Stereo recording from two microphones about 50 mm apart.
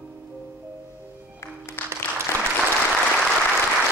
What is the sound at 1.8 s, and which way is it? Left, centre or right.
Music, left.